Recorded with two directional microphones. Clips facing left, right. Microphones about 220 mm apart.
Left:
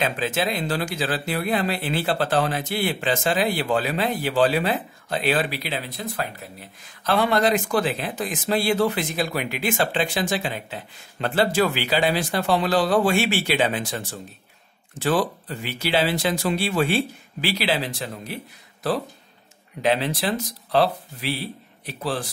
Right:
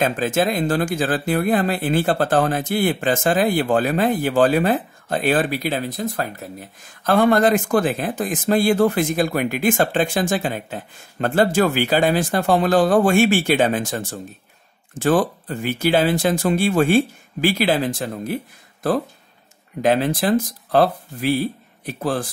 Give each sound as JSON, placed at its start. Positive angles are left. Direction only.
{"t": 0.0, "sound": "speech", "side_deg": -45}